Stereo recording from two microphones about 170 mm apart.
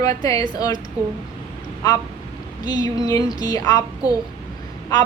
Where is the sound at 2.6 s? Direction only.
25° left (ahead or behind).